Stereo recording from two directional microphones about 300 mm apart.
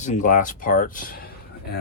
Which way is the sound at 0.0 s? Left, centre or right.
Left.